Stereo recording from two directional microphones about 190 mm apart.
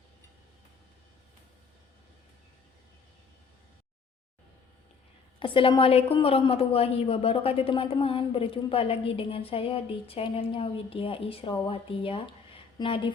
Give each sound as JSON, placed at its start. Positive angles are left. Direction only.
{"t": 5.4, "sound": "a woman's voice", "side_deg": 25}